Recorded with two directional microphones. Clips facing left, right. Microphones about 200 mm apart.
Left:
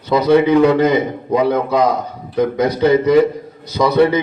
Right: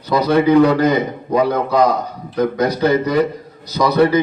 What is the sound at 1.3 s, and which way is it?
A man's voice, 25° left (ahead or behind).